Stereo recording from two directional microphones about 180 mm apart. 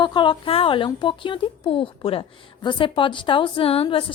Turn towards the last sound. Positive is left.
turn(degrees=30)  # may be behind; listen again after turning